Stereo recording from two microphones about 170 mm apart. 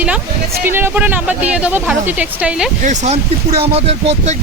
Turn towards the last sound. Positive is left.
turn(degrees=-40)  # may be behind; listen again after turning